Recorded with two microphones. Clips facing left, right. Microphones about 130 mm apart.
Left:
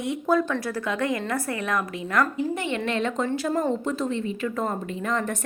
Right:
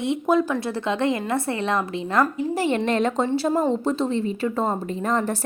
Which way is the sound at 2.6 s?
40° right (ahead or behind).